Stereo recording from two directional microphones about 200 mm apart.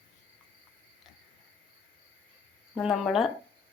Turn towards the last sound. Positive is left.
turn(degrees=0)  # may be behind; listen again after turning